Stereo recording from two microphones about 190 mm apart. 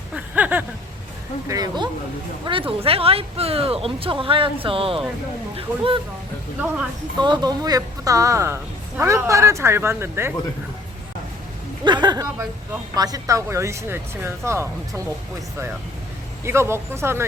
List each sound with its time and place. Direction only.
0.1 s a sound: 10° right (ahead or behind)
1.5 s speech: 20° right (ahead or behind)
7.2 s speech: 20° right (ahead or behind)
11.9 s a sound: 25° right (ahead or behind)
13.0 s speech: 20° right (ahead or behind)
16.4 s speech: 15° right (ahead or behind)